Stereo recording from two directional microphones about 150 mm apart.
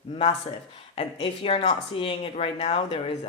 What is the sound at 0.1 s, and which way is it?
Speech, 40° left (ahead or behind).